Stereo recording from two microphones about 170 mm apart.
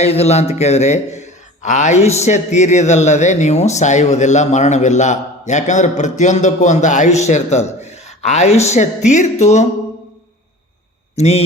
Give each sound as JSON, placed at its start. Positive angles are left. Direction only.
{"t": 0.0, "sound": "a man's voice", "side_deg": 40}
{"t": 11.1, "sound": "speech", "side_deg": 40}